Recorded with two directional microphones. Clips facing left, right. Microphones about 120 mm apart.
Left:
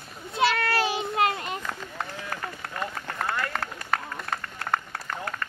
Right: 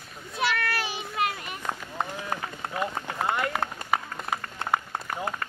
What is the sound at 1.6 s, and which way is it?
Run, 20° right (ahead or behind).